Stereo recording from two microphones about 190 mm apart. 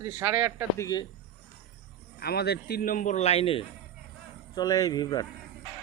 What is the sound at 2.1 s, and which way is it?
Speech, 55° left (ahead or behind).